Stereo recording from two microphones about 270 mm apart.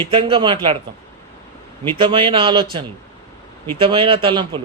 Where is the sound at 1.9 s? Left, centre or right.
Centre.